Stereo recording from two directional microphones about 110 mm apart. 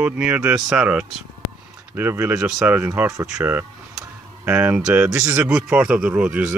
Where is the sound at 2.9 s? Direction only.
25° right (ahead or behind).